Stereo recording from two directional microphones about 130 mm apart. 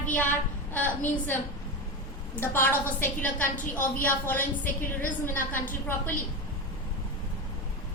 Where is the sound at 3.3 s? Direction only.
90° left.